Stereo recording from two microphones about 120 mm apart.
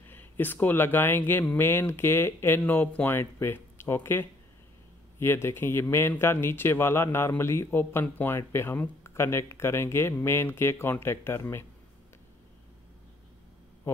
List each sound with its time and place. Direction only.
0.1 s speech: 15° left (ahead or behind)
13.9 s speech: 20° left (ahead or behind)